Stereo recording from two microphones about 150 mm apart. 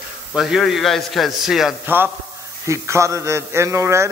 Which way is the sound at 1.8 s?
15° right (ahead or behind).